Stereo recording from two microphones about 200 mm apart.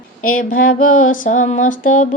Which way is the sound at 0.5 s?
40° left (ahead or behind).